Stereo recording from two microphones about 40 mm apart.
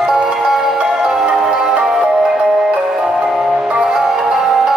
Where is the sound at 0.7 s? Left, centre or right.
Centre.